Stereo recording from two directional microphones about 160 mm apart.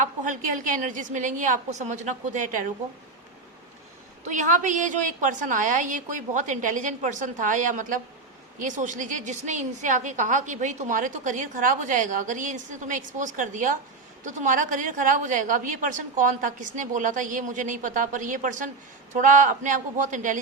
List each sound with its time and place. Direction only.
0.0 s a woman's voice: 55° right (ahead or behind)
4.3 s a woman's voice: 50° right (ahead or behind)